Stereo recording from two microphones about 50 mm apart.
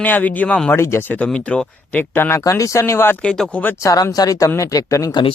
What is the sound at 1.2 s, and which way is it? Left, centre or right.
Speech, left.